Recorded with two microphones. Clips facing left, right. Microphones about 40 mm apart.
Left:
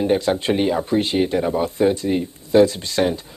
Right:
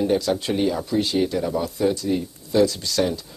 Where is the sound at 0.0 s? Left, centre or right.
Left.